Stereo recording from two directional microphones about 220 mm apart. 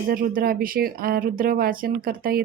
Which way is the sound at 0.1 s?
40° right (ahead or behind).